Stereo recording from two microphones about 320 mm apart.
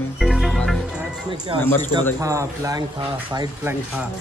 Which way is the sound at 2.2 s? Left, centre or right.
Centre.